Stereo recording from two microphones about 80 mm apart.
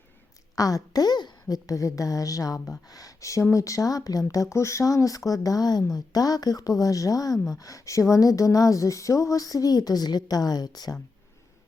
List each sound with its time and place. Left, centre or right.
0.5 s speech: left